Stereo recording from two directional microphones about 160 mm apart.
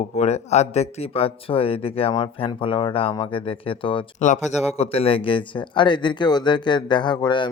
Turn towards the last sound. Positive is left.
turn(degrees=30)  # may be behind; listen again after turning